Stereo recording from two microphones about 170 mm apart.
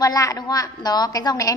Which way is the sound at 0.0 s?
20° left (ahead or behind).